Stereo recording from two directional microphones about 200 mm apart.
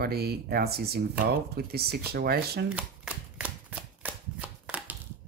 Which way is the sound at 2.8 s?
5° right (ahead or behind).